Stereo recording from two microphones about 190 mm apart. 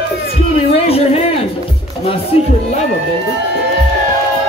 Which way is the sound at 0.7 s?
30° left (ahead or behind).